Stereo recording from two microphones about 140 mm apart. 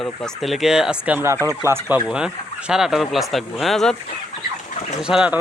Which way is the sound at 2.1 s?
5° right (ahead or behind).